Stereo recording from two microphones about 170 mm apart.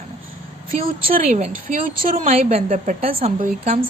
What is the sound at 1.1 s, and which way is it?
A woman's voice, 50° right (ahead or behind).